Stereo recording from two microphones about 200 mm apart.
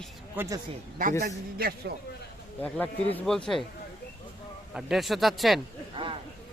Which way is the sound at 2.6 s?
10° left (ahead or behind).